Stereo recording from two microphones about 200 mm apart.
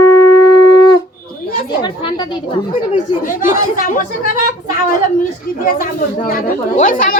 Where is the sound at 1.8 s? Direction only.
20° left (ahead or behind).